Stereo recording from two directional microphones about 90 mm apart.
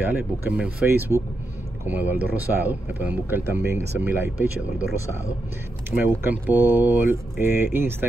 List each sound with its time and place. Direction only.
0.0 s speech: 15° right (ahead or behind)
5.9 s speech: 25° right (ahead or behind)